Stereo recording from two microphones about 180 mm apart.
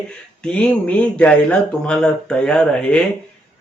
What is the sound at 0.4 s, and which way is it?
A man's voice, 5° left (ahead or behind).